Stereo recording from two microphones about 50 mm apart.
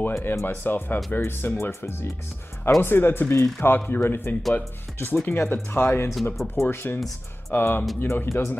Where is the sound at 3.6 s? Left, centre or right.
Left.